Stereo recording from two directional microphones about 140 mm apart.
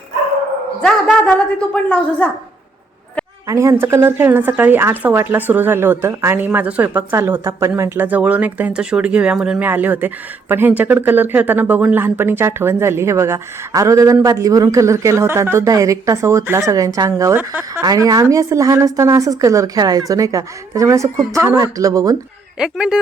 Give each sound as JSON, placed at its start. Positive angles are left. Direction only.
{"t": 0.8, "sound": "a woman's voice", "side_deg": 5}
{"t": 3.4, "sound": "speech", "side_deg": -20}
{"t": 22.5, "sound": "speech", "side_deg": -5}